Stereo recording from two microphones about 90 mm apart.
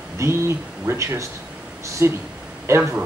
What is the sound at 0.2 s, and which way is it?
Speech, 30° right (ahead or behind).